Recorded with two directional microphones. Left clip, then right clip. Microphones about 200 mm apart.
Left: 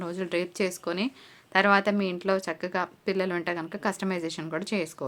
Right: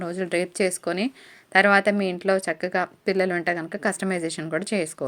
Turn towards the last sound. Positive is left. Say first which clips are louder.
# right 4 dB
turn(degrees=-20)  # may be behind; listen again after turning